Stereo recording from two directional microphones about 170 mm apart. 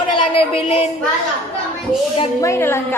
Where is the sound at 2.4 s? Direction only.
15° left (ahead or behind).